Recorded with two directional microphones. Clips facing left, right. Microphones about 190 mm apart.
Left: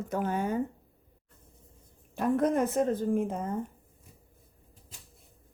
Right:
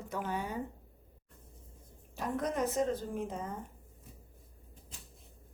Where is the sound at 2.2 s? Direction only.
55° left (ahead or behind).